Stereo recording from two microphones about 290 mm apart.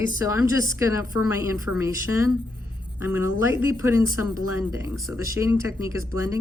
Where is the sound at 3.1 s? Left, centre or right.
Centre.